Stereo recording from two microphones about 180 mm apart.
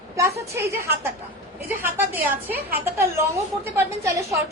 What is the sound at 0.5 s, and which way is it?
A woman's voice, 15° right (ahead or behind).